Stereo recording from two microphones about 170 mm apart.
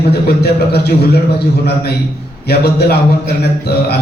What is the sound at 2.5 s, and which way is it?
A man's voice, 70° left (ahead or behind).